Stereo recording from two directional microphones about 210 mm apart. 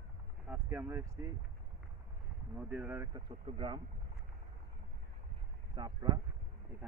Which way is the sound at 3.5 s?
25° right (ahead or behind).